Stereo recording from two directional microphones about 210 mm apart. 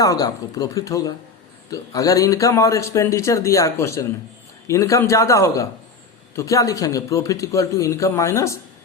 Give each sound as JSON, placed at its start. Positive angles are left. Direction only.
{"t": 0.0, "sound": "speech", "side_deg": 15}